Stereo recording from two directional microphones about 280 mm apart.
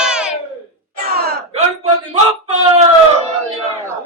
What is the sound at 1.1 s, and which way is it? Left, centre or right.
Speech, right.